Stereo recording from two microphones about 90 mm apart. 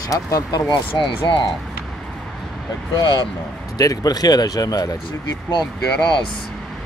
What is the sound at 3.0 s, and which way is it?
Speech, 60° left (ahead or behind).